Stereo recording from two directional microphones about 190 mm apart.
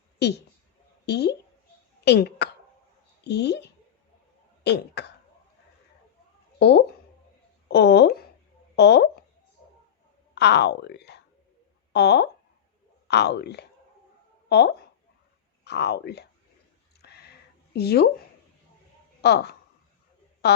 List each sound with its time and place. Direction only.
0.2 s speech: 60° left (ahead or behind)
6.6 s speech: 60° left (ahead or behind)
10.3 s speech: 65° left (ahead or behind)
17.0 s a sound: 55° left (ahead or behind)
17.7 s speech: 60° left (ahead or behind)
19.2 s a woman's voice: 60° left (ahead or behind)